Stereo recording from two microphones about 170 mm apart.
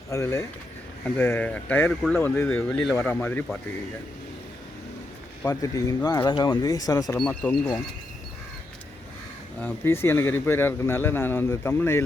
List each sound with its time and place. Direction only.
0.1 s speech: 15° left (ahead or behind)
5.5 s speech: 20° left (ahead or behind)
7.2 s speech: 5° left (ahead or behind)
9.6 s speech: 10° left (ahead or behind)